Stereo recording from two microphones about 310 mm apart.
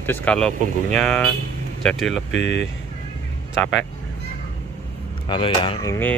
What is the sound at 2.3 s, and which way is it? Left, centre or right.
Speech, left.